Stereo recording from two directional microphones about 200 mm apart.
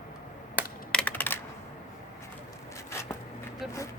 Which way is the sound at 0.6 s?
10° right (ahead or behind).